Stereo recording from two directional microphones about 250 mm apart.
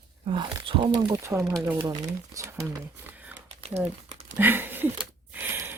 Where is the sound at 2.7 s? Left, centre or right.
Centre.